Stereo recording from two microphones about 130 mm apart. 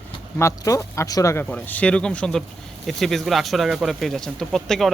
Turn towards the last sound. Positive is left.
turn(degrees=5)  # may be behind; listen again after turning